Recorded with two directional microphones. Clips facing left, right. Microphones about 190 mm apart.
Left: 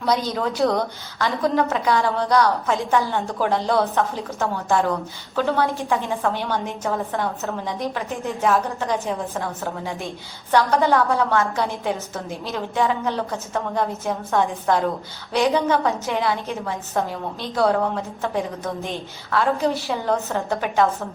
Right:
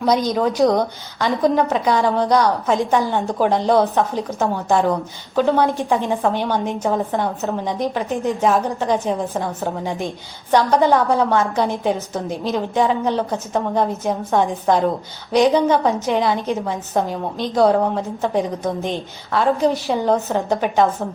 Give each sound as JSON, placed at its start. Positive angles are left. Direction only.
{"t": 0.0, "sound": "a woman's voice", "side_deg": -15}